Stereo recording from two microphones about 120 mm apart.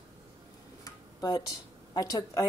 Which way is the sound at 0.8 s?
35° left (ahead or behind).